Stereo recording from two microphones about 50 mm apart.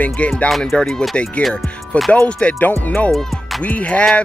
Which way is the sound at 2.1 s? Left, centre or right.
Left.